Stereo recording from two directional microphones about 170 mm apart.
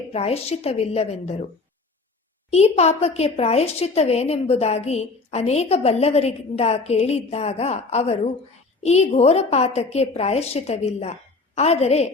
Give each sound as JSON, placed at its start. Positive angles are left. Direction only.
{"t": 0.1, "sound": "a woman's voice", "side_deg": 35}
{"t": 2.5, "sound": "a woman's voice", "side_deg": 40}